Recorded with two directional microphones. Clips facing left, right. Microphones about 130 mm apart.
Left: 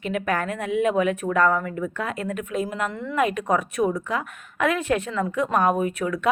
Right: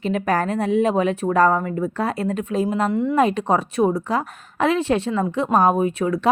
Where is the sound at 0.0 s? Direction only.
35° right (ahead or behind).